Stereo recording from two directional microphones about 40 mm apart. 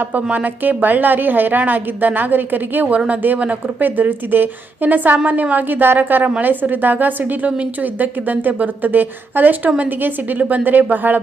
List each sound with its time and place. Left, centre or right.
0.6 s a woman's voice: right